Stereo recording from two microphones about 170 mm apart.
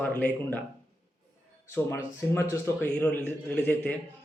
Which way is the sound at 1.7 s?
15° left (ahead or behind).